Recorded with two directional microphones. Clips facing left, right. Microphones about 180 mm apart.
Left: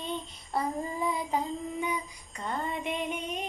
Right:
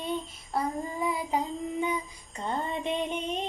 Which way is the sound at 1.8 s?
25° right (ahead or behind).